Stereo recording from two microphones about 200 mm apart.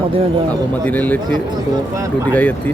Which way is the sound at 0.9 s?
10° left (ahead or behind).